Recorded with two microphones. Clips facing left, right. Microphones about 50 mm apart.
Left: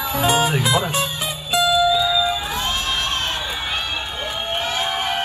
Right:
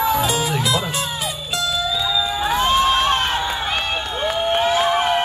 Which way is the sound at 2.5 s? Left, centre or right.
Right.